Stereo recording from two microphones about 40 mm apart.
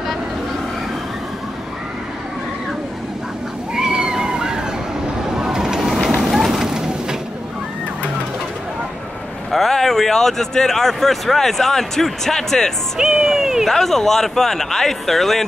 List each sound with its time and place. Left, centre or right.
3.7 s cat: centre
5.3 s vehicle: centre
6.3 s a sound: centre
9.5 s speech: centre
13.0 s music: centre
13.7 s speech: centre